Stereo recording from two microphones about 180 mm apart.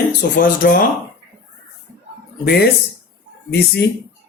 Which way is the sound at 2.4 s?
60° left (ahead or behind).